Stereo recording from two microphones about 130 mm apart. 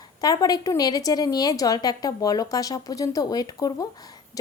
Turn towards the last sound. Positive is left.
turn(degrees=30)  # may be behind; listen again after turning